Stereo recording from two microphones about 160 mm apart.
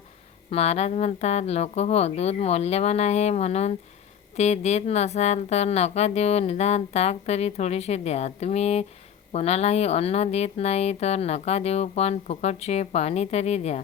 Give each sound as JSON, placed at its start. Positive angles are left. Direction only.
{"t": 0.5, "sound": "speech", "side_deg": 40}